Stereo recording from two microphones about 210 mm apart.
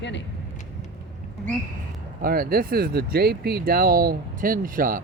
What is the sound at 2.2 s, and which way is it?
Speech, 45° right (ahead or behind).